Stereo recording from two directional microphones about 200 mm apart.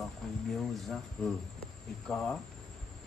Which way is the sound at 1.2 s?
Centre (ahead or behind).